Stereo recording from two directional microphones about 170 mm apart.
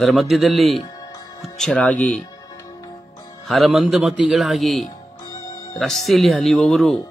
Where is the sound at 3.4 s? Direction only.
Centre (ahead or behind).